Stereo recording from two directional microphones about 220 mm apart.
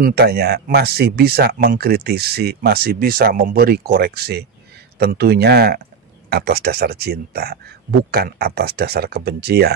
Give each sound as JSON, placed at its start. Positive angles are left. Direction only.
{"t": 0.0, "sound": "speech", "side_deg": -45}